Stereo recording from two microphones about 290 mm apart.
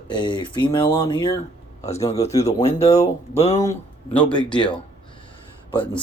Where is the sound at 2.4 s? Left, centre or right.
Left.